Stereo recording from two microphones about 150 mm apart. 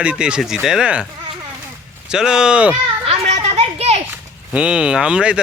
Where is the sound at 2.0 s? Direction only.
5° right (ahead or behind).